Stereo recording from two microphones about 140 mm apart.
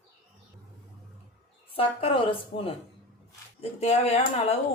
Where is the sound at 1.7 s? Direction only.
40° left (ahead or behind).